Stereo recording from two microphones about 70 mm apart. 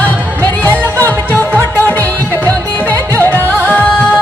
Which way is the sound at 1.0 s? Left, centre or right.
Left.